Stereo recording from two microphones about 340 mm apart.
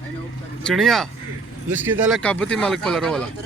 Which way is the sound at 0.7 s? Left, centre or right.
Centre.